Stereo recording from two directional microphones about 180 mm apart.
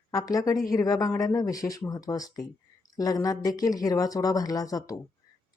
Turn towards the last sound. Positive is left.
turn(degrees=20)  # may be behind; listen again after turning